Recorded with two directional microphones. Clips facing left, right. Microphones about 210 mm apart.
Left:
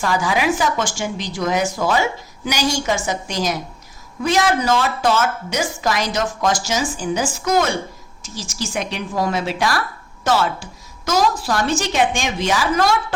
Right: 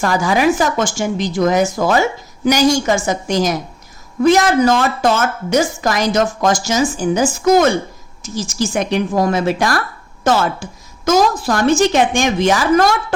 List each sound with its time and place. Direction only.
0.0 s a woman's voice: 45° right (ahead or behind)
8.7 s a woman's voice: 45° right (ahead or behind)